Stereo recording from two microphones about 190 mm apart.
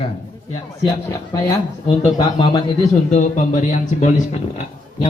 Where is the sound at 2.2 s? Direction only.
25° left (ahead or behind).